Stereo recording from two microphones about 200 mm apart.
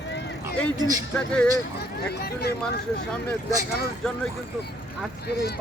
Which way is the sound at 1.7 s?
55° left (ahead or behind).